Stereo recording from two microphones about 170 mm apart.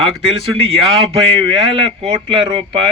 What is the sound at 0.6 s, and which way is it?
Speech, 35° right (ahead or behind).